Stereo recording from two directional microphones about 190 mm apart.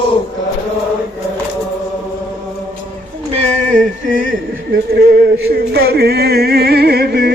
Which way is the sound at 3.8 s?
45° right (ahead or behind).